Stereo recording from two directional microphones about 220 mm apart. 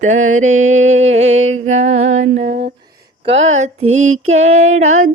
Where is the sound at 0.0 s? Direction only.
35° right (ahead or behind).